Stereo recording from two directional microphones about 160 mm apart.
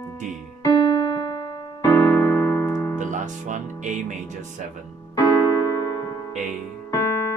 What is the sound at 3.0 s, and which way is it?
Music, 50° right (ahead or behind).